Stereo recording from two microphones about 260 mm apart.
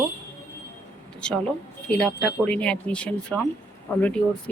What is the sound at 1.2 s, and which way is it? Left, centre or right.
Speech, centre.